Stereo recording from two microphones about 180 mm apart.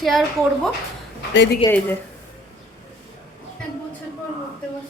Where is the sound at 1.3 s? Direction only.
75° left (ahead or behind).